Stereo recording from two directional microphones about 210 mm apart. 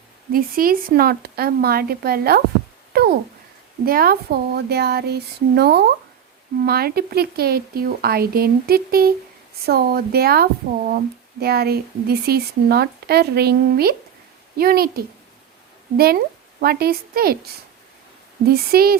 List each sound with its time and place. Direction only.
0.3 s speech: 45° right (ahead or behind)
2.9 s a sound: 50° right (ahead or behind)
3.8 s a woman's voice: 45° right (ahead or behind)
18.4 s speech: 45° right (ahead or behind)